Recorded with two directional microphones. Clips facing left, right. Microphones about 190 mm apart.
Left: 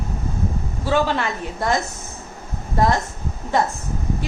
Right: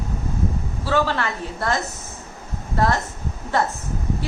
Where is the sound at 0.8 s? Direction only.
15° left (ahead or behind).